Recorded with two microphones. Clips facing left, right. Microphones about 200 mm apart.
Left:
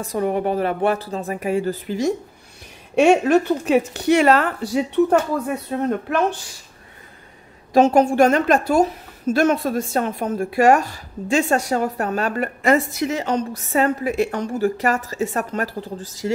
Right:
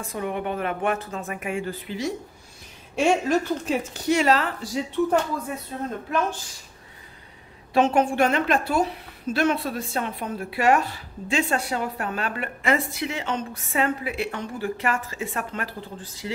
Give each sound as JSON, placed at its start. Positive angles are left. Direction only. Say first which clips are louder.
{"t": 0.0, "sound": "speech", "louder": "left 7 dB", "side_deg": 40}
{"t": 3.0, "sound": "a woman's voice", "louder": "left 7 dB", "side_deg": 65}
{"t": 7.7, "sound": "a woman's voice", "louder": "left 6 dB", "side_deg": 40}